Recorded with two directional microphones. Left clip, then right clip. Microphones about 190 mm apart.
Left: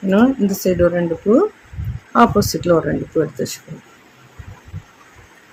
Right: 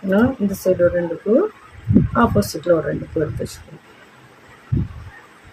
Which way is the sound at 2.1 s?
30° left (ahead or behind).